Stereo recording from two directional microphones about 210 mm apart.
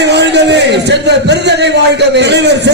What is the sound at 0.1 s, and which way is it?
A man's voice, 55° right (ahead or behind).